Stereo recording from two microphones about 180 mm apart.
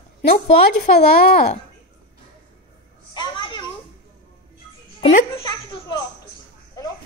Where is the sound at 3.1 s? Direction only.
25° left (ahead or behind).